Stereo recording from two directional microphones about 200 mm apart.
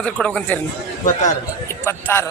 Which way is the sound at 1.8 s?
10° left (ahead or behind).